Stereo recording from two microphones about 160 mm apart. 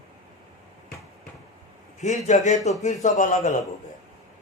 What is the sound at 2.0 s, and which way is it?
A man's voice, 45° left (ahead or behind).